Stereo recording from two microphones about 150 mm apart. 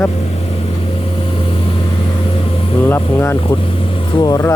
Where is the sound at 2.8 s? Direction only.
15° left (ahead or behind).